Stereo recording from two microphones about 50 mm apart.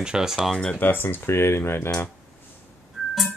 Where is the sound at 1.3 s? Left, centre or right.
Left.